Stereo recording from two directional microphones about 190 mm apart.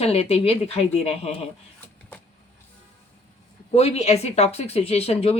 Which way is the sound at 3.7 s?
35° left (ahead or behind).